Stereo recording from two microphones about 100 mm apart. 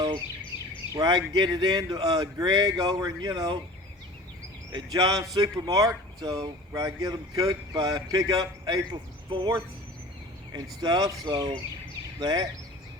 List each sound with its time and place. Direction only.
0.5 s a sound: 50° left (ahead or behind)
0.9 s speech: 40° right (ahead or behind)
4.7 s speech: 40° right (ahead or behind)
12.2 s speech: 40° right (ahead or behind)